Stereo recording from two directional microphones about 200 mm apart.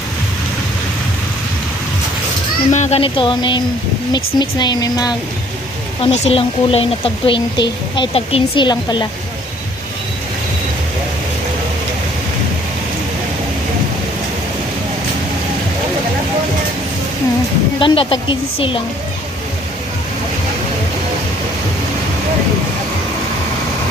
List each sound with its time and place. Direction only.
2.7 s a woman's voice: 35° left (ahead or behind)
17.7 s a woman's voice: 25° left (ahead or behind)